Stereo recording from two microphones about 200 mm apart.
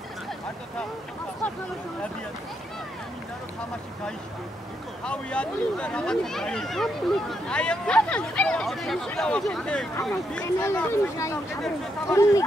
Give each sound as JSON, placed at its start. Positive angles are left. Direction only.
{"t": 5.0, "sound": "speech", "side_deg": 5}